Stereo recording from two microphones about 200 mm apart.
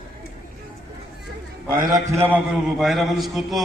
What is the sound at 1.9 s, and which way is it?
Speech, 15° right (ahead or behind).